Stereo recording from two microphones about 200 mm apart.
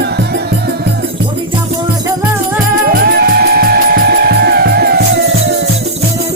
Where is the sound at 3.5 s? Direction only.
50° right (ahead or behind).